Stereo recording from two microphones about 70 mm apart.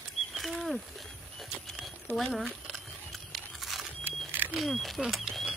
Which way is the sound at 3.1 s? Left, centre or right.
Centre.